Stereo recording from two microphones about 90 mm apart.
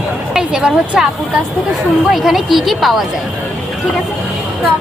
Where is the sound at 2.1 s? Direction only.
5° right (ahead or behind).